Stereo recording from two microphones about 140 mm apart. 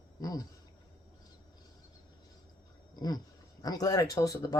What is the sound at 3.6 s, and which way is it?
Speech, 25° left (ahead or behind).